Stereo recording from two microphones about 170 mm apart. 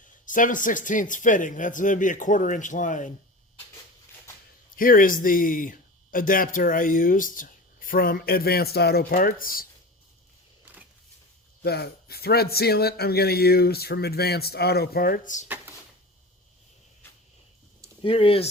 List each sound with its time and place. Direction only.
0.3 s speech: 50° left (ahead or behind)
4.8 s speech: 55° left (ahead or behind)
10.7 s a sound: 10° right (ahead or behind)
11.6 s a man's voice: 65° left (ahead or behind); by 15.4 s 50° left (ahead or behind)
15.4 s drawer open or close: 10° right (ahead or behind)
18.0 s speech: 30° left (ahead or behind)